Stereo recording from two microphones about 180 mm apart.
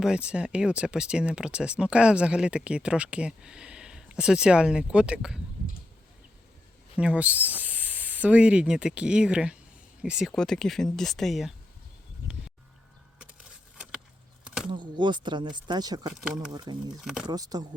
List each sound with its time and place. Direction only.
0.0 s speech: 5° right (ahead or behind)
6.9 s speech: 5° right (ahead or behind)
14.4 s a sound: 5° right (ahead or behind)
14.7 s speech: 25° right (ahead or behind)
17.0 s speech: 5° right (ahead or behind)
17.2 s speech: 20° right (ahead or behind)